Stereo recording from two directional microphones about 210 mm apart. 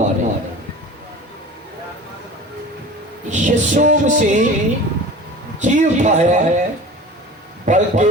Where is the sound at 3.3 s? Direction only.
35° right (ahead or behind).